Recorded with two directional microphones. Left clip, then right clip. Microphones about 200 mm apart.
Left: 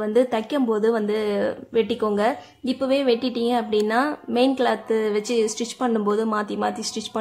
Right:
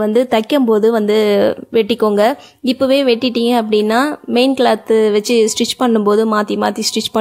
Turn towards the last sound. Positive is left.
turn(degrees=-40)  # may be behind; listen again after turning